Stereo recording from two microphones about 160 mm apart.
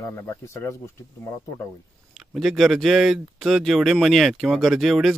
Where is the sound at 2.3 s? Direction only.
Centre (ahead or behind).